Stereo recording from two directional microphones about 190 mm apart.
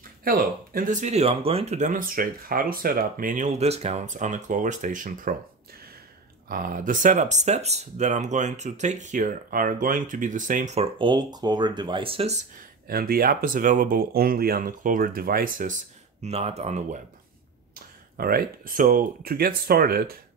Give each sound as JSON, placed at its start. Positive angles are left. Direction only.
{"t": 0.2, "sound": "speech", "side_deg": -50}
{"t": 6.5, "sound": "speech", "side_deg": -45}
{"t": 12.8, "sound": "speech", "side_deg": -50}
{"t": 18.1, "sound": "speech", "side_deg": -50}